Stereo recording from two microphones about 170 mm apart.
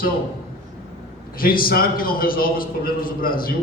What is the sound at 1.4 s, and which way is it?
A man's voice, 55° left (ahead or behind).